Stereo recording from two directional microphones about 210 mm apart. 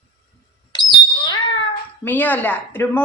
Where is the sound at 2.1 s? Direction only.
10° left (ahead or behind).